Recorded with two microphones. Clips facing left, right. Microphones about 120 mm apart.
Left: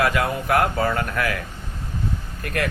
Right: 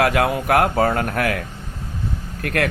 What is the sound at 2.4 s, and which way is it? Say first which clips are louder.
Speech: right 4 dB; 70° right (ahead or behind).